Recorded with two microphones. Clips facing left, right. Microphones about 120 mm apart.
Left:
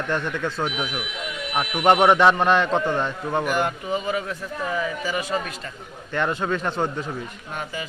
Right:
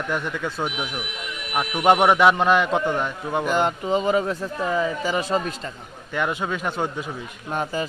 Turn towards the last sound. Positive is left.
turn(degrees=-35)  # may be behind; listen again after turning